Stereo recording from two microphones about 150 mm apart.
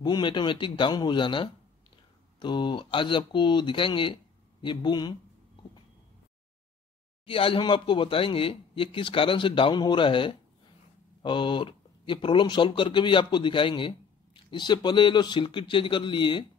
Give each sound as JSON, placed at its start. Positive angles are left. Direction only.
{"t": 0.0, "sound": "speech", "side_deg": 30}
{"t": 7.2, "sound": "speech", "side_deg": 35}